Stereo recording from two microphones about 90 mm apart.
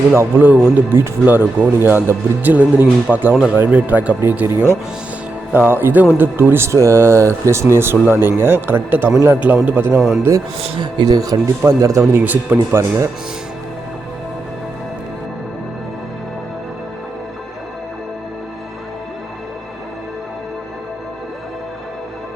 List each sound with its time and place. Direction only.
0.1 s speech: 25° right (ahead or behind)
10.0 s a man's voice: centre (ahead or behind)
10.6 s speech: 60° right (ahead or behind)
11.6 s speech: 35° right (ahead or behind)
12.1 s speech: 20° right (ahead or behind)